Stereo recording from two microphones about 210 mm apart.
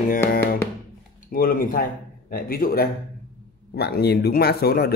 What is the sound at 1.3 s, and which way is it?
A man's voice, 45° left (ahead or behind).